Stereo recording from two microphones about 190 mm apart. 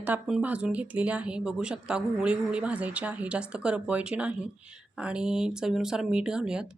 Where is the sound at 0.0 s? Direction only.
5° right (ahead or behind).